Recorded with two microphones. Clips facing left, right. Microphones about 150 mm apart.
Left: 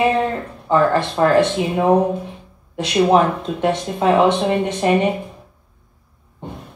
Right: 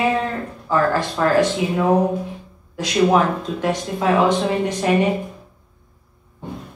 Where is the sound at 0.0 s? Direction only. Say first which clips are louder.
Left 3 dB; 20° left (ahead or behind).